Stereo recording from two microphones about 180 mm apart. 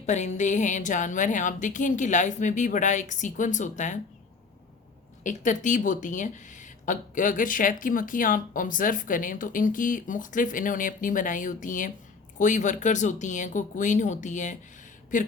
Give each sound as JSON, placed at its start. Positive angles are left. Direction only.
{"t": 0.0, "sound": "speech", "side_deg": 40}
{"t": 5.2, "sound": "speech", "side_deg": 45}